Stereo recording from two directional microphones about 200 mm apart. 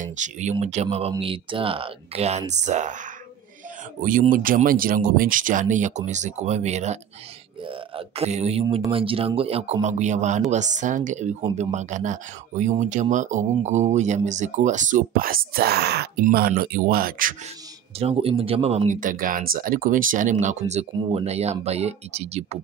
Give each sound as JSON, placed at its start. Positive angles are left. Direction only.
{"t": 0.0, "sound": "speech", "side_deg": -35}
{"t": 4.0, "sound": "speech", "side_deg": -45}
{"t": 17.9, "sound": "speech", "side_deg": -30}